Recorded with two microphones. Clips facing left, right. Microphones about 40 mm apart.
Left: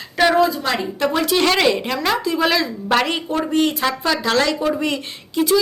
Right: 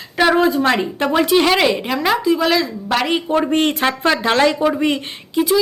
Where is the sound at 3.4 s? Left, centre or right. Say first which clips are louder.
Right 2 dB; right.